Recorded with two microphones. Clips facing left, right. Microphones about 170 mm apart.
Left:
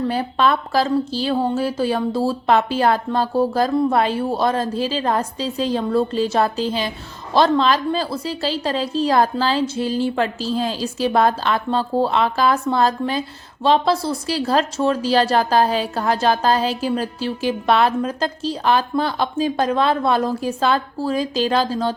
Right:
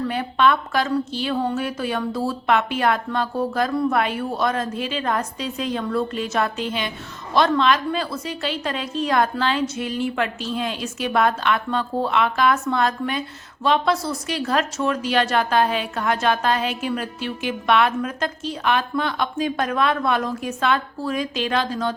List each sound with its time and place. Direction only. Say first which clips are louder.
0.1 s a woman's voice: left 1 dB; 35° left (ahead or behind)